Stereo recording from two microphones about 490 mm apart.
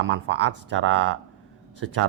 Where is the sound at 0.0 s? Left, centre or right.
Right.